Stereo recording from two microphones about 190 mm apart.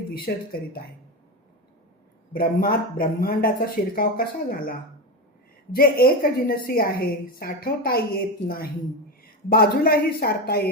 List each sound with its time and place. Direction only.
0.3 s a woman's voice: 50° left (ahead or behind)
2.3 s a woman's voice: 50° left (ahead or behind)